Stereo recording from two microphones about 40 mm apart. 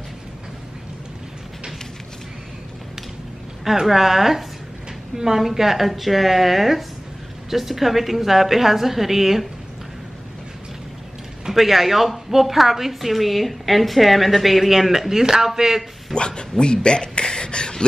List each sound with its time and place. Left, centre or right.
3.8 s a woman's voice: centre
11.4 s a woman's voice: centre
16.2 s speech: left